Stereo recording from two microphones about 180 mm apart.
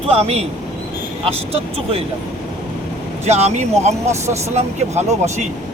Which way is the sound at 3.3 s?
35° right (ahead or behind).